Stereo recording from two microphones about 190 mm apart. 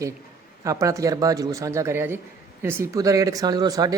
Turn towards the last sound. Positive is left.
turn(degrees=-20)  # may be behind; listen again after turning